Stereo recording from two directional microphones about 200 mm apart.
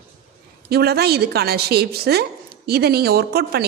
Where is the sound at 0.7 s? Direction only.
50° right (ahead or behind).